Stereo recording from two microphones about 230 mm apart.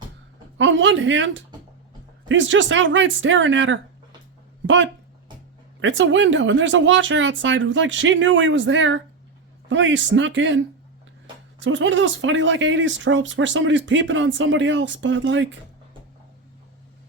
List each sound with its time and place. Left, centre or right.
0.6 s speech: right